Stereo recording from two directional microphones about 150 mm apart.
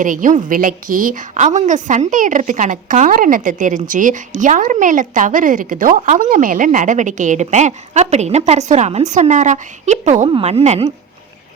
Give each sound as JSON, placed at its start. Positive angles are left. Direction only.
{"t": 0.0, "sound": "a woman's voice", "side_deg": -60}